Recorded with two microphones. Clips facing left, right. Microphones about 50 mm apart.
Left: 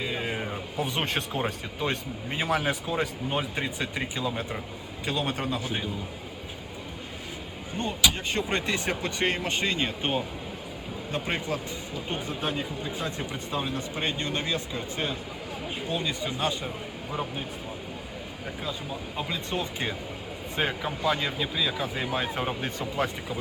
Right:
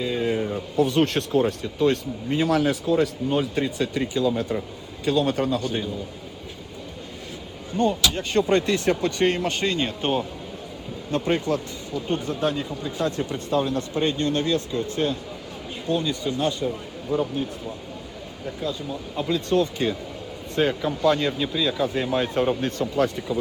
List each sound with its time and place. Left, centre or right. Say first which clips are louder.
0.0 s speech: right 7 dB; left
7.8 s speech: right 5 dB; left
18.6 s speech: right 6 dB; centre